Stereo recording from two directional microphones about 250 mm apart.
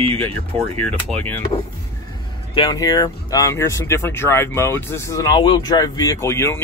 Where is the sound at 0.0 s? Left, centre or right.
Right.